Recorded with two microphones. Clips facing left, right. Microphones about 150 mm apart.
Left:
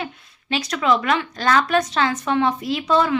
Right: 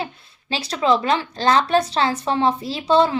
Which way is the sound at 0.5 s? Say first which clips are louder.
Right 1 dB; 30° right (ahead or behind).